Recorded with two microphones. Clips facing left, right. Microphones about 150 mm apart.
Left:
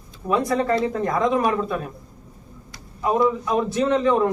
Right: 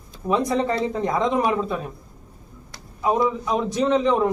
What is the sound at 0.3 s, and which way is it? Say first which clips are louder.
Speech: left 1 dB; 20° right (ahead or behind).